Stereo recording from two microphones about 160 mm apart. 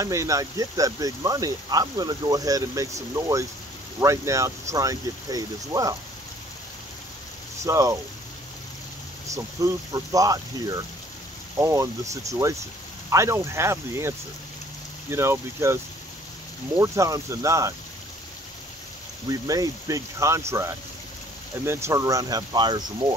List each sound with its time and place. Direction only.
0.0 s speech: 20° right (ahead or behind)
7.6 s speech: 20° right (ahead or behind)
9.3 s speech: 20° right (ahead or behind)
16.8 s speech: 20° right (ahead or behind)
19.2 s speech: 20° right (ahead or behind)